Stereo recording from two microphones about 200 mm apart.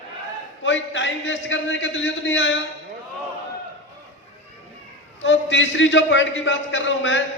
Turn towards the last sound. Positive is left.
turn(degrees=65)  # may be behind; listen again after turning